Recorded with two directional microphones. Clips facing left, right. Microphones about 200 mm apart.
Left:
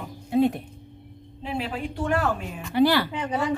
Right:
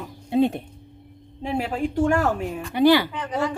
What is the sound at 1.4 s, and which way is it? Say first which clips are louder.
Speech: right 5 dB; 45° right (ahead or behind).